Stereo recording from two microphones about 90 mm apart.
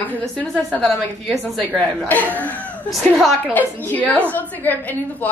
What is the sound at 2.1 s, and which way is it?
A woman's voice, 20° left (ahead or behind).